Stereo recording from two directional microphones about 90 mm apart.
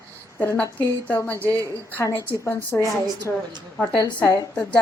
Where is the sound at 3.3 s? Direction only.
10° left (ahead or behind).